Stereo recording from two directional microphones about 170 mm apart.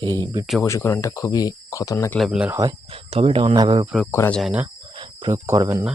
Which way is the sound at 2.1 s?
Centre (ahead or behind).